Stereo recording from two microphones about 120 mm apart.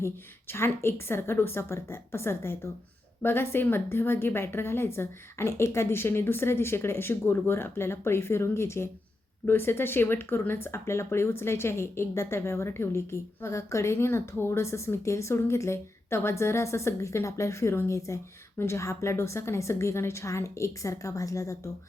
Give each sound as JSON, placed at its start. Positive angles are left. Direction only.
{"t": 0.0, "sound": "speech", "side_deg": 20}